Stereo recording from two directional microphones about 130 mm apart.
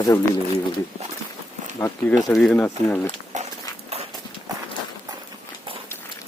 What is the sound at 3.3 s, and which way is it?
Dog, 65° right (ahead or behind).